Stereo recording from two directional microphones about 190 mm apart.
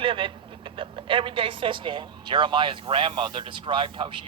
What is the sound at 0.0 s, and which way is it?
Speech, 25° right (ahead or behind).